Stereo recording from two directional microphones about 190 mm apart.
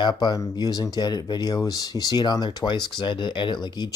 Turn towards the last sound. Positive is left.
turn(degrees=20)  # may be behind; listen again after turning